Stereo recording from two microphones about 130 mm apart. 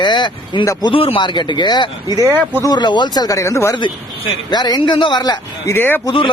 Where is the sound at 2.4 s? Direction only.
15° left (ahead or behind).